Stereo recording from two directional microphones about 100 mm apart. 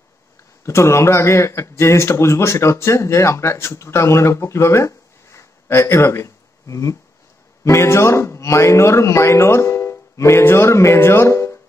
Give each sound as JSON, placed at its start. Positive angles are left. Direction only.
{"t": 0.7, "sound": "speech", "side_deg": 30}